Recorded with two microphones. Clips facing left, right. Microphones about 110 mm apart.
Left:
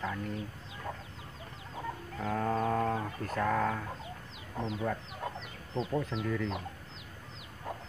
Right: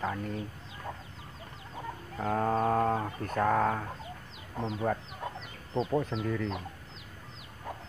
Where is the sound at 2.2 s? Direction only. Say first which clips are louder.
Right 3 dB; 35° right (ahead or behind).